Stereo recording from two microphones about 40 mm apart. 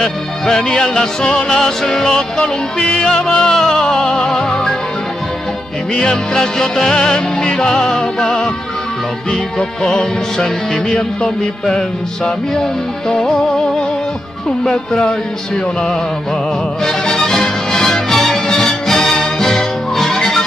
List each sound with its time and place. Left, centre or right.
0.0 s music: centre
2.4 s music: left
5.9 s music: centre
9.6 s music: centre
14.6 s music: centre
16.8 s music: centre